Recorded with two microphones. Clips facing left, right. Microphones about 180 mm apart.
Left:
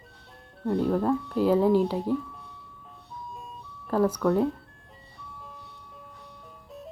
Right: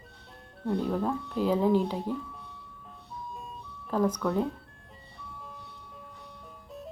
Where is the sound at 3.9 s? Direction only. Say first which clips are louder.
Left 4 dB; 10° left (ahead or behind).